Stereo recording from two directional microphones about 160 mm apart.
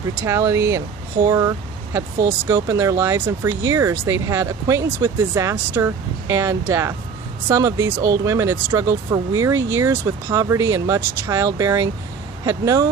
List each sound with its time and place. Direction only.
0.2 s speech: 15° right (ahead or behind)